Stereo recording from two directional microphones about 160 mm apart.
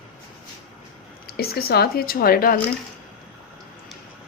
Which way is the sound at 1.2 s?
80° left.